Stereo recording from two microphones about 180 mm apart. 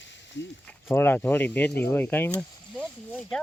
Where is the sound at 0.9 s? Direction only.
10° left (ahead or behind).